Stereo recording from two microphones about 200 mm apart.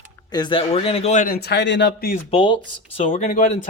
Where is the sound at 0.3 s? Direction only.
20° left (ahead or behind); by 2.1 s 55° left (ahead or behind).